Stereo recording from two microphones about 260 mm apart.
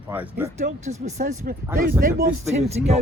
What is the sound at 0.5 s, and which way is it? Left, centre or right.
Speech, right.